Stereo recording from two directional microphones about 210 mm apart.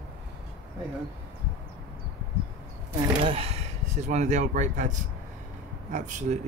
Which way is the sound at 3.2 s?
25° right (ahead or behind).